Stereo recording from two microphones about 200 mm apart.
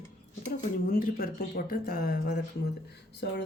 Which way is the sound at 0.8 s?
45° left (ahead or behind).